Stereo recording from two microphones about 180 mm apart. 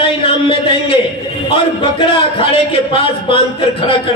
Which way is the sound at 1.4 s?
30° left (ahead or behind).